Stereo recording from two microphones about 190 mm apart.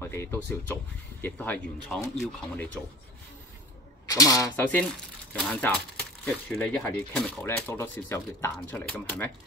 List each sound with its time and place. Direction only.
0.0 s speech: 15° left (ahead or behind)
4.1 s speech: 20° left (ahead or behind)